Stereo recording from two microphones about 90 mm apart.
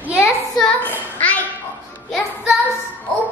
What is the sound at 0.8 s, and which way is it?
Speech, 15° left (ahead or behind).